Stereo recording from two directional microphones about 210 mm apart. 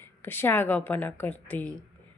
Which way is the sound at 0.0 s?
10° left (ahead or behind).